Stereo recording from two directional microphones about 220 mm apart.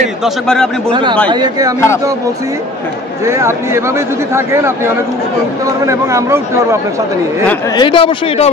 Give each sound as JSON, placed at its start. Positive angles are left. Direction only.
{"t": 0.2, "sound": "a man's voice", "side_deg": 5}
{"t": 1.3, "sound": "speech", "side_deg": -20}
{"t": 3.3, "sound": "speech", "side_deg": -10}
{"t": 5.9, "sound": "speech", "side_deg": -15}
{"t": 7.7, "sound": "speech", "side_deg": 25}